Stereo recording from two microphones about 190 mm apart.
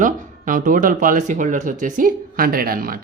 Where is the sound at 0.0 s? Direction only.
45° right (ahead or behind).